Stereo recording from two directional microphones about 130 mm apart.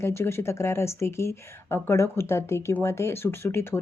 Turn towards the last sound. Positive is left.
turn(degrees=20)  # may be behind; listen again after turning